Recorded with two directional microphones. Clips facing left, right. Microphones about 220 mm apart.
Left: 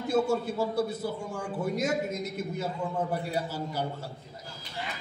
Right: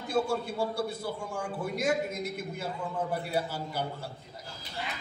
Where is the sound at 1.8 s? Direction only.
40° left (ahead or behind).